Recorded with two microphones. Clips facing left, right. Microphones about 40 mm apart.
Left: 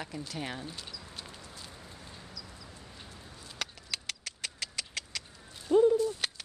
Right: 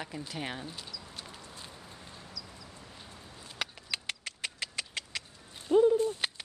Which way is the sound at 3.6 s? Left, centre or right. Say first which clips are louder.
Right 2 dB; right.